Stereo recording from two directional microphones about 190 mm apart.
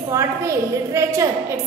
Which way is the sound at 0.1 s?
15° right (ahead or behind).